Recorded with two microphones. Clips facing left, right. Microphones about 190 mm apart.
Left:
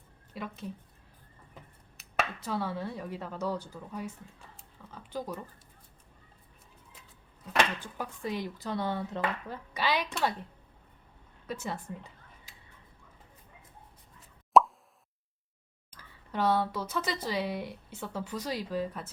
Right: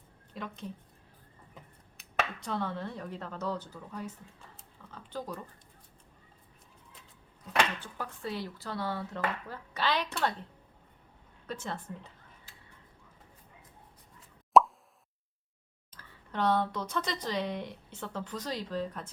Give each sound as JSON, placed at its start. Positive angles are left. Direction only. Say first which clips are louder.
{"t": 0.3, "sound": "speech", "louder": "left 1 dB", "side_deg": 5}
{"t": 2.0, "sound": "speech", "louder": "left 1 dB", "side_deg": 5}
{"t": 7.8, "sound": "speech", "louder": "left 2 dB", "side_deg": 15}
{"t": 11.4, "sound": "a sound", "louder": "left 2 dB", "side_deg": 10}
{"t": 14.5, "sound": "plop", "louder": "even", "side_deg": 0}
{"t": 15.9, "sound": "speech", "louder": "left 3 dB", "side_deg": 10}